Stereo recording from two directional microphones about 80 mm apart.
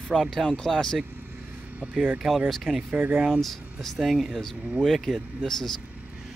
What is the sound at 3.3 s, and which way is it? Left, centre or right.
Speech, centre.